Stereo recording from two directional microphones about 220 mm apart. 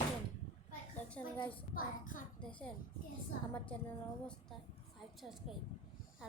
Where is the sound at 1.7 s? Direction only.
40° left (ahead or behind).